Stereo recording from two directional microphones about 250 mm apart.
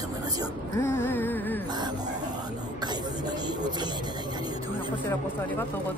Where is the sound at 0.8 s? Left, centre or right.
Centre.